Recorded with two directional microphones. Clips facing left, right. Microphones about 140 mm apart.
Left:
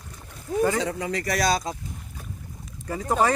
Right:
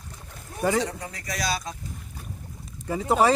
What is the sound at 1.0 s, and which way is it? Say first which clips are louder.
Speech: left 8 dB; 85° left.